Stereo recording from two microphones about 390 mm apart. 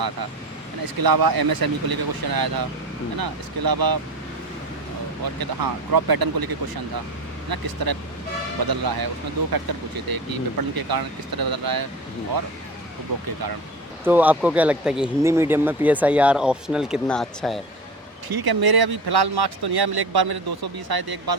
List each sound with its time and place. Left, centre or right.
0.9 s speech: right
5.2 s speech: right
7.5 s speech: right
10.1 s speech: right
13.1 s speech: right
14.0 s speech: centre
18.3 s speech: right